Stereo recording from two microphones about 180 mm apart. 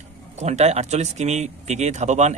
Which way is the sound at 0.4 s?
35° right (ahead or behind).